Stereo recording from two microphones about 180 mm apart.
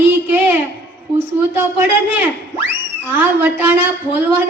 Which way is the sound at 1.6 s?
10° right (ahead or behind).